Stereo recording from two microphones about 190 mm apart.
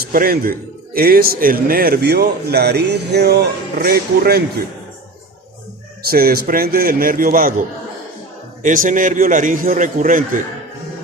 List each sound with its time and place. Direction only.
0.0 s a man's voice: 50° right (ahead or behind)
6.1 s a man's voice: 50° right (ahead or behind)
8.6 s a man's voice: 45° right (ahead or behind)